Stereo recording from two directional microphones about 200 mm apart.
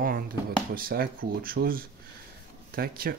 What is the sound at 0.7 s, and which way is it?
Speech, 45° right (ahead or behind).